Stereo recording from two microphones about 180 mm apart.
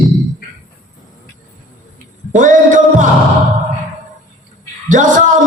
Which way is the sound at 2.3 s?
45° right (ahead or behind).